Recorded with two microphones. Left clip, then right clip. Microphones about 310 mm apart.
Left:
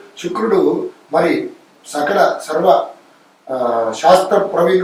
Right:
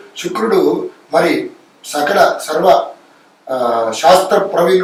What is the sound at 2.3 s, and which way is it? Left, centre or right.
Speech, left.